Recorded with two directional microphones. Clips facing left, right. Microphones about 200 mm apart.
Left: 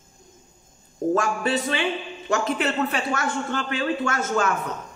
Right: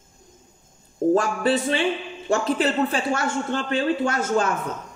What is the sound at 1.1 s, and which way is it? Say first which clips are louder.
Speech: right 2 dB; 30° right (ahead or behind).